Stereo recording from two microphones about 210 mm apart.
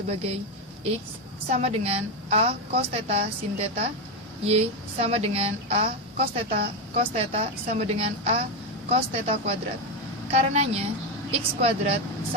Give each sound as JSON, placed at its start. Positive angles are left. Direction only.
{"t": 0.1, "sound": "a woman's voice", "side_deg": -30}
{"t": 1.5, "sound": "a woman's voice", "side_deg": -30}